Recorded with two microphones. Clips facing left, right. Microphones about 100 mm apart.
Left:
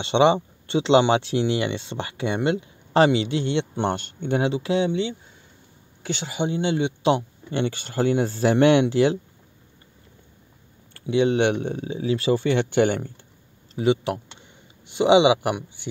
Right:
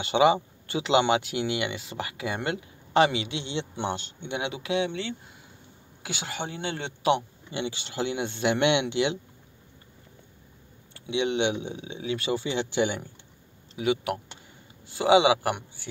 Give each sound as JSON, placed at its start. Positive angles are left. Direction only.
{"t": 0.0, "sound": "speech", "side_deg": 30}
{"t": 3.7, "sound": "speech", "side_deg": 50}
{"t": 4.4, "sound": "speech", "side_deg": 35}
{"t": 6.0, "sound": "speech", "side_deg": -5}
{"t": 6.3, "sound": "speech", "side_deg": 20}
{"t": 7.5, "sound": "speech", "side_deg": 50}
{"t": 10.9, "sound": "speech", "side_deg": 40}
{"t": 11.4, "sound": "speech", "side_deg": 55}
{"t": 11.9, "sound": "speech", "side_deg": 35}
{"t": 12.4, "sound": "speech", "side_deg": 55}
{"t": 13.7, "sound": "speech", "side_deg": 30}